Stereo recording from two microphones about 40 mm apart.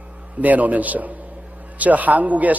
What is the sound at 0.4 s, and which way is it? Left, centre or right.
A man's voice, right.